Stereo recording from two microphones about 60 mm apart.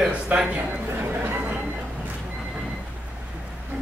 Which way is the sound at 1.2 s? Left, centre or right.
Right.